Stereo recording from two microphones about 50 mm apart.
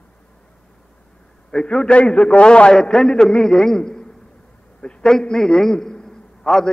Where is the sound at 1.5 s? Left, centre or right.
Centre.